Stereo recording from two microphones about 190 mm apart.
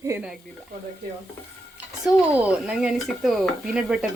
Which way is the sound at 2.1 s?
5° right (ahead or behind).